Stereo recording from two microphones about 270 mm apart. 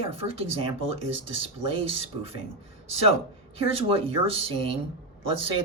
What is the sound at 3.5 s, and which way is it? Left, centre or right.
Speech, right.